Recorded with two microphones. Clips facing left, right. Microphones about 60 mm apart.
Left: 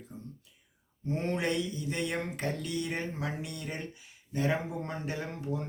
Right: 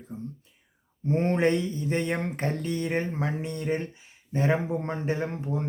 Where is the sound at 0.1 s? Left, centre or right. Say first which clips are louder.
Right 10 dB; right.